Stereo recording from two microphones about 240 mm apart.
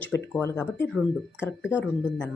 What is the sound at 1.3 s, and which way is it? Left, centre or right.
Speech, left.